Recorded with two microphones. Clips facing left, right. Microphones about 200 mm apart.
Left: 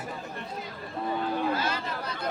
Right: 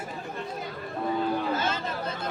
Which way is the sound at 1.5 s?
25° right (ahead or behind).